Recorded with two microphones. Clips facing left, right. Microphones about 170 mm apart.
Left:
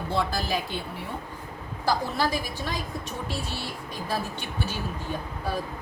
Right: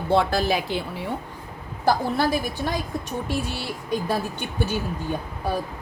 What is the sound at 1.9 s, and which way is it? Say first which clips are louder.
Speech: right 5 dB; 50° right (ahead or behind).